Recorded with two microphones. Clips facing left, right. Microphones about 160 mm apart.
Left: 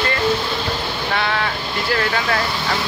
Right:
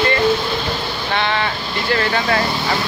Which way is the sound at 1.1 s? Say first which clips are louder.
Right 2 dB; 5° left (ahead or behind).